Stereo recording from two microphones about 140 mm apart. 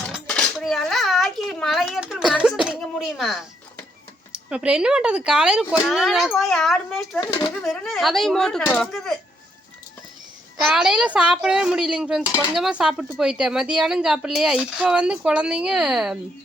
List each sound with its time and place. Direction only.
0.3 s dishes: 5° left (ahead or behind)
4.3 s speech: 5° right (ahead or behind)
7.2 s speech: 30° left (ahead or behind)
7.6 s speech: centre (ahead or behind)
10.6 s speech: 5° right (ahead or behind)